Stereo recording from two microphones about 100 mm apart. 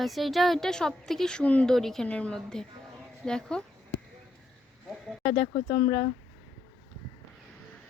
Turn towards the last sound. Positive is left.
turn(degrees=75)  # may be behind; listen again after turning